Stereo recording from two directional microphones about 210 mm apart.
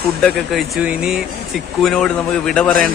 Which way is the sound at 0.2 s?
Centre (ahead or behind).